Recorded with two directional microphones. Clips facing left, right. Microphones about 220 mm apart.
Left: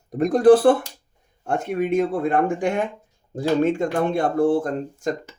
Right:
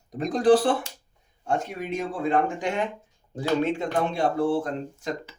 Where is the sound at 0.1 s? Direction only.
55° left (ahead or behind).